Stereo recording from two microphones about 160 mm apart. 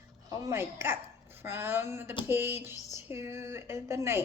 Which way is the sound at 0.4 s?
15° right (ahead or behind).